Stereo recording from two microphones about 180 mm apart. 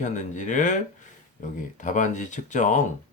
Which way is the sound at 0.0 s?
45° left (ahead or behind).